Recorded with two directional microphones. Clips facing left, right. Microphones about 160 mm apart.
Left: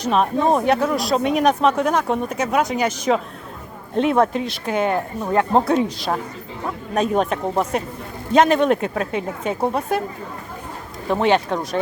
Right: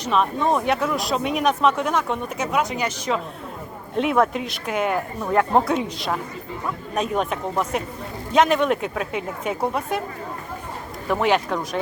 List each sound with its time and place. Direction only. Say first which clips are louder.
0.0 s speech: left 3 dB; 40° left (ahead or behind)
3.9 s speech: left 3 dB; 30° left (ahead or behind)
5.7 s speech: left 4 dB; 35° left (ahead or behind)
11.1 s speech: left 2 dB; 25° left (ahead or behind)